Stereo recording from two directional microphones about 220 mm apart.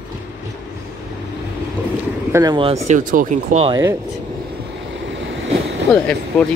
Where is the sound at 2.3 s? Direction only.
20° right (ahead or behind).